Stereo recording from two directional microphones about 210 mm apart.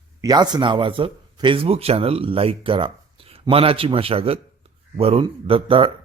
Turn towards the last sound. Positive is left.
turn(degrees=-25)  # may be behind; listen again after turning